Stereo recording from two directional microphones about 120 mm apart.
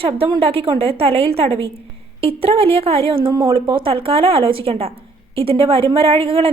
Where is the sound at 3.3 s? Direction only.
30° right (ahead or behind).